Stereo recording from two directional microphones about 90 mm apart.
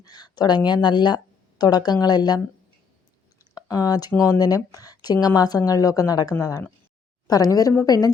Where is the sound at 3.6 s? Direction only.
45° left (ahead or behind).